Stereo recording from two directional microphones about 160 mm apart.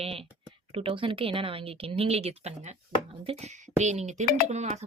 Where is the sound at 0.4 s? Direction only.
35° right (ahead or behind).